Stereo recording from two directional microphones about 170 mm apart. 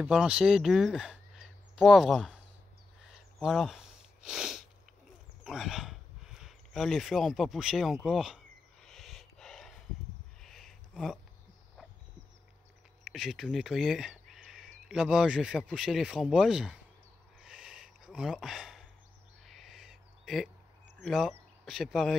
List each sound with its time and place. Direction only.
0.0 s speech: 5° right (ahead or behind)
3.1 s sniff: centre (ahead or behind)
8.8 s a sound: centre (ahead or behind)
13.0 s speech: 5° right (ahead or behind)
17.4 s a sound: 5° right (ahead or behind)
21.1 s speech: centre (ahead or behind)